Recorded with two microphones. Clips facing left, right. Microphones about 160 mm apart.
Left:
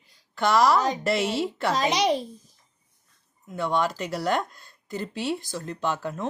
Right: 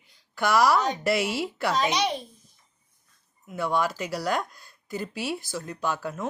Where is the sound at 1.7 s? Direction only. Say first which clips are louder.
Left 3 dB; 35° left (ahead or behind).